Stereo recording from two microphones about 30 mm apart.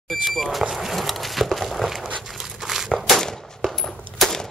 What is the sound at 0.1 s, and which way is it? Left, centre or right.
Speech, centre.